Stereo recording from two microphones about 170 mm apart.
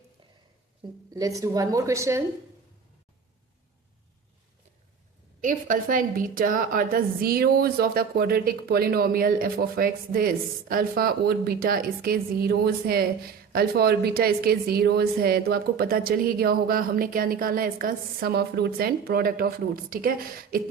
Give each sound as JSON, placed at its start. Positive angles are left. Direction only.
{"t": 1.1, "sound": "a woman's voice", "side_deg": -20}
{"t": 5.4, "sound": "a woman's voice", "side_deg": -50}